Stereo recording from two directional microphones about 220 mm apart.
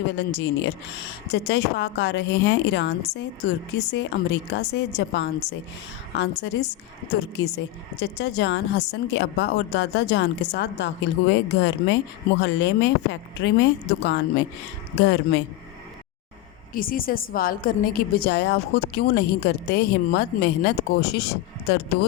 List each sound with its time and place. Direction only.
0.2 s a woman's voice: 55° left (ahead or behind)
16.7 s a woman's voice: 40° left (ahead or behind)